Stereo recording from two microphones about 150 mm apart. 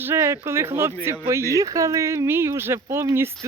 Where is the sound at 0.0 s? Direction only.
15° right (ahead or behind).